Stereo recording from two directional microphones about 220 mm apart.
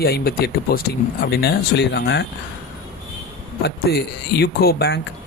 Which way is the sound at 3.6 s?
45° left (ahead or behind).